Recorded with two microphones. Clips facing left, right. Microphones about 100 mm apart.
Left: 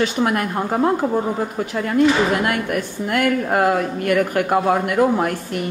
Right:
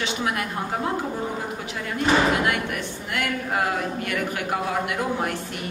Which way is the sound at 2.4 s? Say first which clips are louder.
Left 4 dB; 45° left (ahead or behind).